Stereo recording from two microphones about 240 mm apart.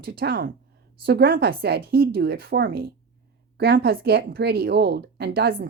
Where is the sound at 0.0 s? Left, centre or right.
Right.